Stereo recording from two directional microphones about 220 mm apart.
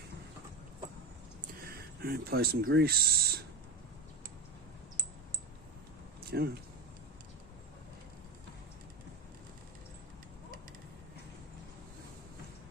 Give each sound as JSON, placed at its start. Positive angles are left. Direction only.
{"t": 1.4, "sound": "a sound", "side_deg": -45}
{"t": 2.6, "sound": "speech", "side_deg": -45}
{"t": 6.3, "sound": "speech", "side_deg": -45}